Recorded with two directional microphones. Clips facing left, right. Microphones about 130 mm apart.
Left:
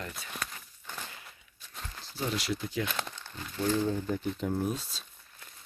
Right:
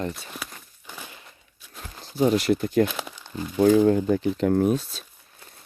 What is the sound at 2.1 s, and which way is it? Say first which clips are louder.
Speech: right 13 dB; 55° right (ahead or behind).